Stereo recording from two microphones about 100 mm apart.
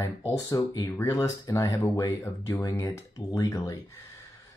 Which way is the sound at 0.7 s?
35° left (ahead or behind).